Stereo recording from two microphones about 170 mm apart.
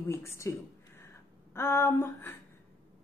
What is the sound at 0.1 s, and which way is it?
A woman's voice, 15° left (ahead or behind).